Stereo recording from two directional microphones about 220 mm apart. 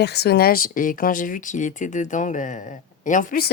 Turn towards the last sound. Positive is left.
turn(degrees=40)  # may be behind; listen again after turning